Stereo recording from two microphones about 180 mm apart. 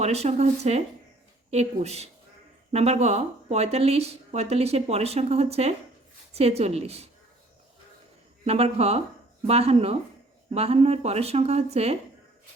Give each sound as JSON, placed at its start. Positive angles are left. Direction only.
{"t": 0.0, "sound": "speech", "side_deg": -35}
{"t": 8.4, "sound": "speech", "side_deg": -35}